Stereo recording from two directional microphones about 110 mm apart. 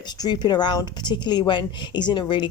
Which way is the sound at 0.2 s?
40° left (ahead or behind).